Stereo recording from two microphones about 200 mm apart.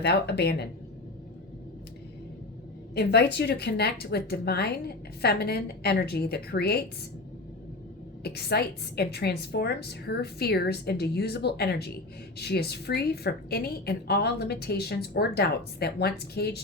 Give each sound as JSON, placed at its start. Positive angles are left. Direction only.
{"t": 0.0, "sound": "speech", "side_deg": 55}
{"t": 2.9, "sound": "a woman's voice", "side_deg": 55}
{"t": 8.2, "sound": "a woman's voice", "side_deg": 55}